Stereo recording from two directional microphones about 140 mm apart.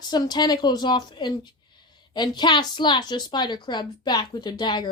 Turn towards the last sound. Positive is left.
turn(degrees=30)  # may be behind; listen again after turning